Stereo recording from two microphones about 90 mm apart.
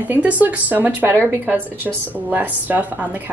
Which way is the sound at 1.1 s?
15° left (ahead or behind).